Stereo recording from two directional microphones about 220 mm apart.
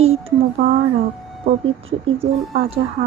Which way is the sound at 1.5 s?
25° right (ahead or behind).